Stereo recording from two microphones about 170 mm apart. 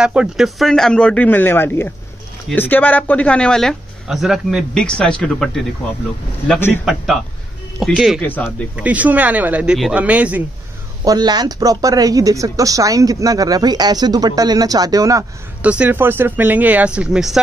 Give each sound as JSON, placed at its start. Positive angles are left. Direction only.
{"t": 0.0, "sound": "speech", "side_deg": -5}
{"t": 7.8, "sound": "speech", "side_deg": 0}
{"t": 11.1, "sound": "speech", "side_deg": -25}
{"t": 15.6, "sound": "speech", "side_deg": -10}